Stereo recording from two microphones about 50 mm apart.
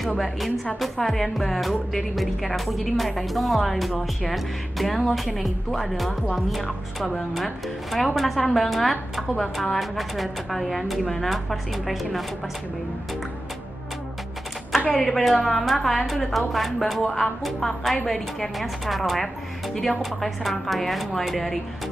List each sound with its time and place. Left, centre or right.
0.7 s a woman's voice: centre
7.3 s a woman's voice: centre
14.8 s a woman's voice: left
15.0 s a woman's voice: centre